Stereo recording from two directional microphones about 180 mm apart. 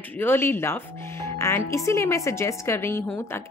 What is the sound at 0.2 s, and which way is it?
Speech, 15° left (ahead or behind).